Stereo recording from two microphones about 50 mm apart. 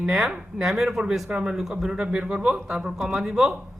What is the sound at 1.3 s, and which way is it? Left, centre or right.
A woman's voice, centre.